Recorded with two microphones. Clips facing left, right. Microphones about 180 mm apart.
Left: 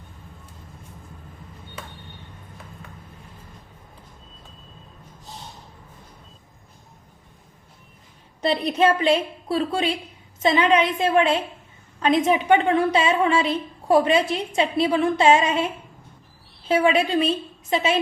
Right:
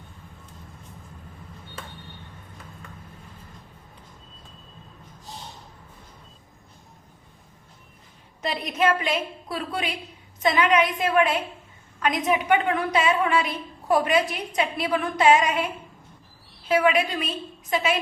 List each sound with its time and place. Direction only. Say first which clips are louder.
8.4 s a woman's voice: left 5 dB; 30° left (ahead or behind)